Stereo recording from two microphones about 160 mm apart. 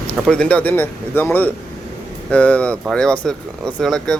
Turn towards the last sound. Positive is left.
turn(degrees=0)  # may be behind; listen again after turning